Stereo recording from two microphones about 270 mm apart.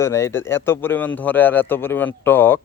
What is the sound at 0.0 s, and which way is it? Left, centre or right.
Speech, centre.